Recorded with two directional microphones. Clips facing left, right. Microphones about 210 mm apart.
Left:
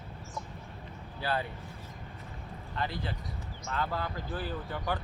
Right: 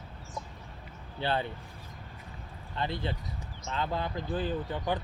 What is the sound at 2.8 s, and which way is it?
Speech, 25° right (ahead or behind).